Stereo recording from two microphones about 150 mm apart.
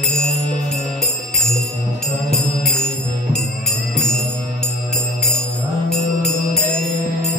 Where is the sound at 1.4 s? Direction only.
Centre (ahead or behind).